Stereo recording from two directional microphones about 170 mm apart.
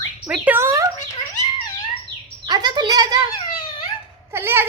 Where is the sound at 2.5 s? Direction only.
25° right (ahead or behind).